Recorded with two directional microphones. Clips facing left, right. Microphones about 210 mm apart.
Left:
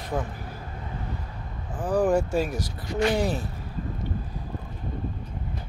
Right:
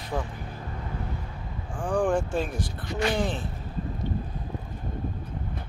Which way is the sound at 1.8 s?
5° left (ahead or behind).